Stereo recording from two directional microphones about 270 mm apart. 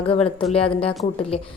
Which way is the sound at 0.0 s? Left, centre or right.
Centre.